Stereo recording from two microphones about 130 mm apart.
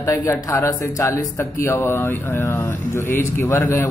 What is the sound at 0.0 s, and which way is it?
Speech, 25° left (ahead or behind).